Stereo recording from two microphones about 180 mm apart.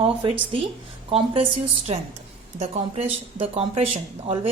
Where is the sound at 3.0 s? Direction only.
35° right (ahead or behind).